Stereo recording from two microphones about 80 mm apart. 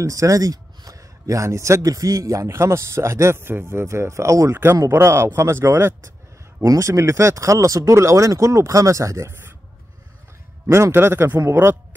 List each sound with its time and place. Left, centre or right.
0.0 s a man's voice: right
6.6 s a man's voice: right
10.7 s a man's voice: right